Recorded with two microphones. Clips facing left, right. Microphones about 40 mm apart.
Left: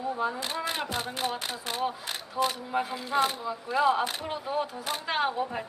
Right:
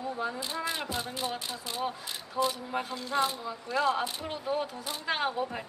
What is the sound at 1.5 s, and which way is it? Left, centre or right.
Speech, left.